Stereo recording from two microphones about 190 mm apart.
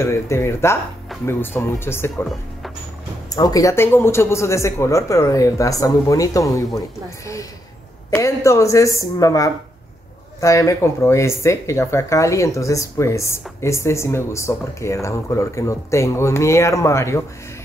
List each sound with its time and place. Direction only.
0.0 s speech: 15° left (ahead or behind)
3.3 s speech: 20° left (ahead or behind)
8.1 s speech: 15° left (ahead or behind)